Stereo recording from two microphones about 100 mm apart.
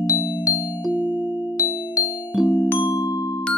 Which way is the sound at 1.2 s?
15° right (ahead or behind).